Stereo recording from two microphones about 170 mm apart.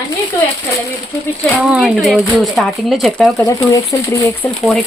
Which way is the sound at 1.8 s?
5° right (ahead or behind).